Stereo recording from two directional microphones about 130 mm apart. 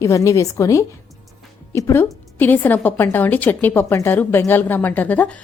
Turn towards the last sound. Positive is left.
turn(degrees=10)  # may be behind; listen again after turning